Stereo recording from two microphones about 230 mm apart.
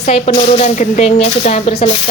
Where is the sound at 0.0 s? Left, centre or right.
Left.